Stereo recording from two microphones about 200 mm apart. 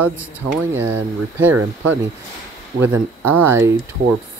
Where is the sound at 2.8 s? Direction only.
10° right (ahead or behind).